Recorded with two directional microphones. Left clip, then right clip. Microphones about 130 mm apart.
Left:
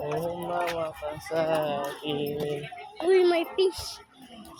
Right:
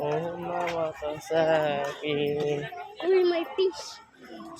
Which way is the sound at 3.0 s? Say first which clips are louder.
Left 2 dB; 65° left (ahead or behind).